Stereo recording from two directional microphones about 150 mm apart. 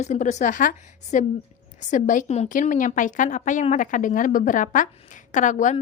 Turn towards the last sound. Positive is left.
turn(degrees=55)  # may be behind; listen again after turning